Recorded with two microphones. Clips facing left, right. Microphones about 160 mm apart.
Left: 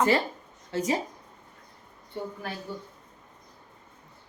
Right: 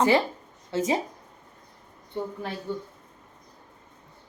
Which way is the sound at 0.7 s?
25° right (ahead or behind).